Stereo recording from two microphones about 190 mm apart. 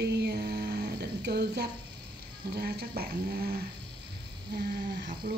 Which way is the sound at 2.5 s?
55° right (ahead or behind).